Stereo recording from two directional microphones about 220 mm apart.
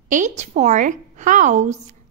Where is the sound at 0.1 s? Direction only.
35° right (ahead or behind).